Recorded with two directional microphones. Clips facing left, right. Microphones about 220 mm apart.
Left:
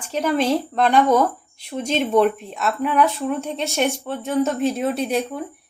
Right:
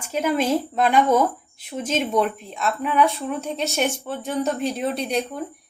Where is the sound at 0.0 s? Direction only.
10° right (ahead or behind).